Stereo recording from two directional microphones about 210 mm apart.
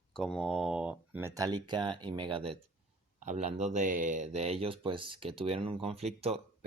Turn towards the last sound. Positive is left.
turn(degrees=-30)  # may be behind; listen again after turning